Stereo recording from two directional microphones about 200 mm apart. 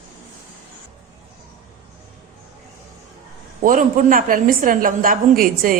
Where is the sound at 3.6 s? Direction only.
40° right (ahead or behind).